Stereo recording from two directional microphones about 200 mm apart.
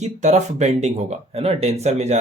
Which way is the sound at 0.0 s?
35° right (ahead or behind).